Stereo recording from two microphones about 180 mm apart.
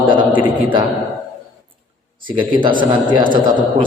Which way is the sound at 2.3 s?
25° right (ahead or behind).